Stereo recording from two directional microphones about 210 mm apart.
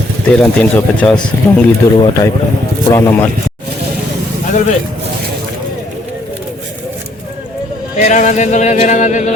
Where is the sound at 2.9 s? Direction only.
15° left (ahead or behind).